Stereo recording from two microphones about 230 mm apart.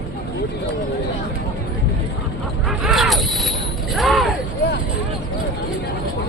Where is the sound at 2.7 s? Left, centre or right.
Centre.